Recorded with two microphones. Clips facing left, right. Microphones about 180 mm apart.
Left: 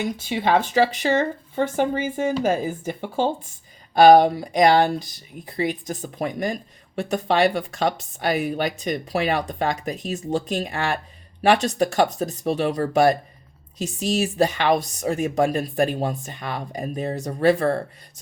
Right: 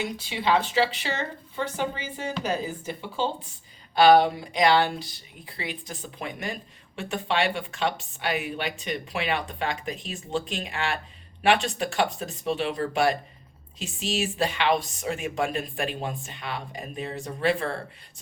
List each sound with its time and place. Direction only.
0.0 s speech: 50° left (ahead or behind)